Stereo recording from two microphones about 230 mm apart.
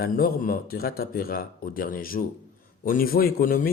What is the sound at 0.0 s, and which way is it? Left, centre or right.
A man's voice, left.